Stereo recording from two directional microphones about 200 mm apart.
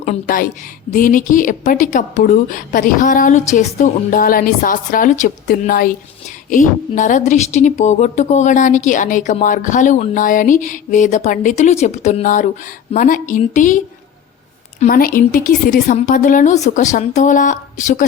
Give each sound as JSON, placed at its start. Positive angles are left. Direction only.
{"t": 0.0, "sound": "a woman's voice", "side_deg": 40}